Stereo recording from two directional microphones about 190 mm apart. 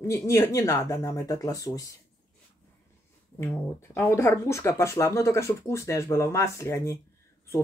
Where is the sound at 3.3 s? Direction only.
15° left (ahead or behind).